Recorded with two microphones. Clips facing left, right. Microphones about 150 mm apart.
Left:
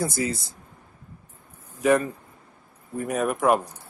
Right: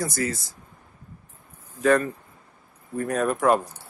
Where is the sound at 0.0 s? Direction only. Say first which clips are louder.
Left 1 dB; 20° left (ahead or behind).